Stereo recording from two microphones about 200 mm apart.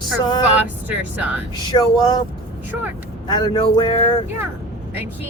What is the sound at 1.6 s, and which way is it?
Speech, 20° left (ahead or behind).